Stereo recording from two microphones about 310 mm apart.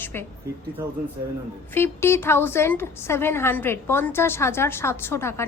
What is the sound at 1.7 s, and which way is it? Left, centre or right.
A woman's voice, centre.